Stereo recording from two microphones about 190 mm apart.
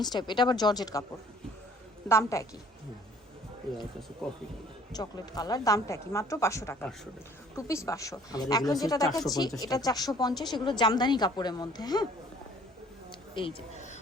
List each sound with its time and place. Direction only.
0.0 s speech: 20° left (ahead or behind)
2.0 s a woman's voice: 15° left (ahead or behind)
4.2 s speech: 5° left (ahead or behind)
4.9 s a woman's voice: 20° left (ahead or behind)
13.1 s a sound: 25° left (ahead or behind)